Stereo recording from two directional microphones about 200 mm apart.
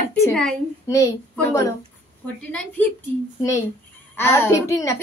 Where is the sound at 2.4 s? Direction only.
5° left (ahead or behind).